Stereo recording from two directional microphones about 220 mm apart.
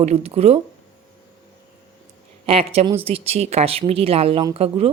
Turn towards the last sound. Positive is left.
turn(degrees=-25)  # may be behind; listen again after turning